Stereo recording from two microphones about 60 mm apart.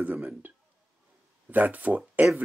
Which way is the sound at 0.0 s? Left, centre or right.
Right.